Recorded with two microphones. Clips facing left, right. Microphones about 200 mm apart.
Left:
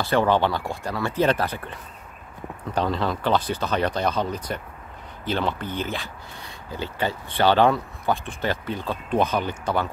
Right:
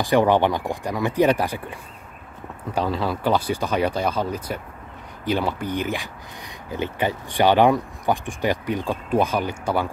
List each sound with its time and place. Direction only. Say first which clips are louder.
0.0 s speech: right 3 dB; 15° right (ahead or behind)